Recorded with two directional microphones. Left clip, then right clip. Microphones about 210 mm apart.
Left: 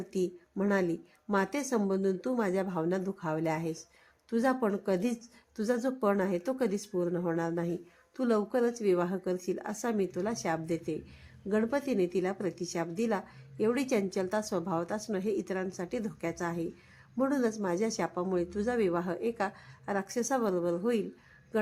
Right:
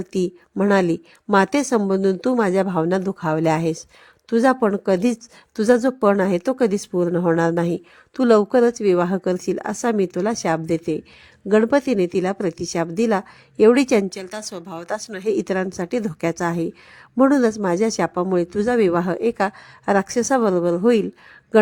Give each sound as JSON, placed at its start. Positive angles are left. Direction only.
{"t": 0.1, "sound": "speech", "side_deg": -45}
{"t": 14.5, "sound": "speech", "side_deg": -10}
{"t": 14.8, "sound": "speech", "side_deg": -45}